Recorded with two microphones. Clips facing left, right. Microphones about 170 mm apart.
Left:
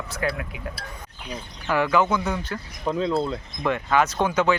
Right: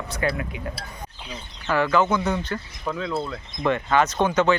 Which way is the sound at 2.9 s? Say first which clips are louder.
Left 4 dB; 30° left (ahead or behind).